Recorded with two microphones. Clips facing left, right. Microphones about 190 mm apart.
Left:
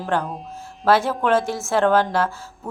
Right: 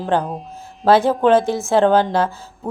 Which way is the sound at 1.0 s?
35° right (ahead or behind).